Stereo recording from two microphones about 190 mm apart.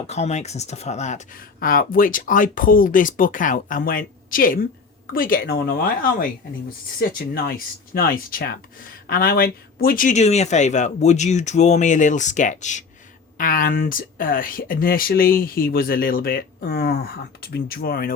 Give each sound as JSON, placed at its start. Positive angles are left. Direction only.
{"t": 0.1, "sound": "speech", "side_deg": 35}
{"t": 7.3, "sound": "speech", "side_deg": 55}